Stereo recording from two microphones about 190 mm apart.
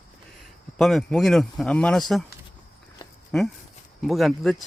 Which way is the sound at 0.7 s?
Centre (ahead or behind).